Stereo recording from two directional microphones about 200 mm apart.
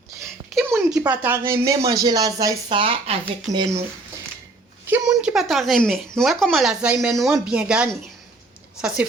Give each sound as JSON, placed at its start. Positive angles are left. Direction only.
{"t": 0.8, "sound": "speech", "side_deg": -5}
{"t": 4.9, "sound": "speech", "side_deg": -10}